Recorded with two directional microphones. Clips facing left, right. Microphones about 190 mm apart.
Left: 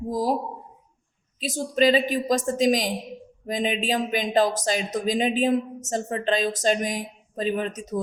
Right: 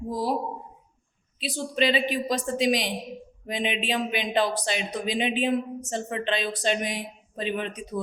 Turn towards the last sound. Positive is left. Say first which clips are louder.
# left 4 dB
turn(degrees=40)  # may be behind; listen again after turning